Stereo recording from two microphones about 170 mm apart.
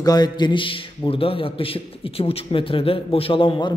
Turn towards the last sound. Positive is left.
turn(degrees=30)  # may be behind; listen again after turning